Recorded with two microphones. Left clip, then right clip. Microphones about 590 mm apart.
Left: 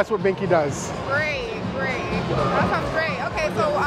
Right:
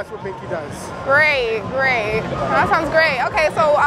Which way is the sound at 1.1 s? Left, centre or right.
Right.